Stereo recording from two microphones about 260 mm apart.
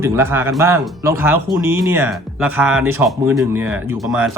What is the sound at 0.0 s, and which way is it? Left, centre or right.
Speech, centre.